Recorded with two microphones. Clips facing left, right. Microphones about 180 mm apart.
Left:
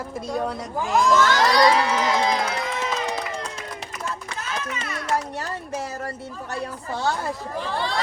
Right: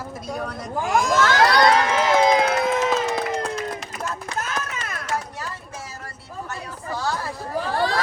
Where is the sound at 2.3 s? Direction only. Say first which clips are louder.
Right 6 dB; 65° right (ahead or behind).